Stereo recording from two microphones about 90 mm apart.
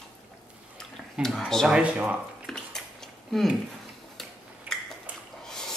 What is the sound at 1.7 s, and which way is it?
Speech, 15° right (ahead or behind).